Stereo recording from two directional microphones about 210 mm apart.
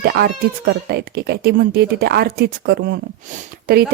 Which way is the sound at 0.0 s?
50° right (ahead or behind).